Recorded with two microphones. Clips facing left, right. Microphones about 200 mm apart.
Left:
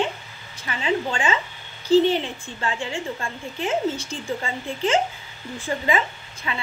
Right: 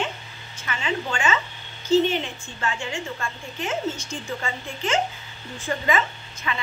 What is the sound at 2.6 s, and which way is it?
A woman's voice, 30° left (ahead or behind).